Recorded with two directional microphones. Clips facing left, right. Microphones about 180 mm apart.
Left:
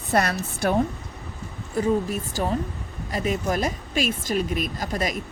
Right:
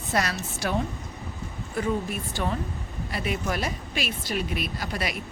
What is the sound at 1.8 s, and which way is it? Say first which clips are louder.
Speech: left 5 dB; 40° left (ahead or behind).